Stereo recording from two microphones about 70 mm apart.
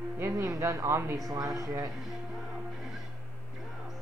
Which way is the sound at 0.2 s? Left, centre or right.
Right.